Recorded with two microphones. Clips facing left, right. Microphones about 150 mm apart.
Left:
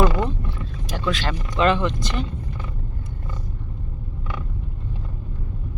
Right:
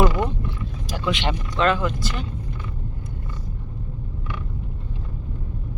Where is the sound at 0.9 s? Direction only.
20° right (ahead or behind).